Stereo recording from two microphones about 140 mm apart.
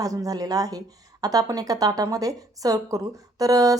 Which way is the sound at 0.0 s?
25° right (ahead or behind).